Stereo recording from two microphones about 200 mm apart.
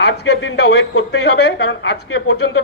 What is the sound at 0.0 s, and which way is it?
A man's voice, 60° left (ahead or behind).